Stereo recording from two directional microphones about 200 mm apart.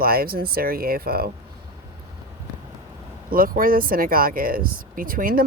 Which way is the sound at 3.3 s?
45° right (ahead or behind).